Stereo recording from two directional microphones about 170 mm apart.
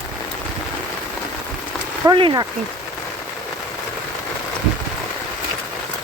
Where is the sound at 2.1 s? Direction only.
25° right (ahead or behind).